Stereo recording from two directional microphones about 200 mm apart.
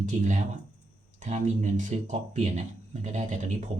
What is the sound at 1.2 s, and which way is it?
Speech, 35° right (ahead or behind).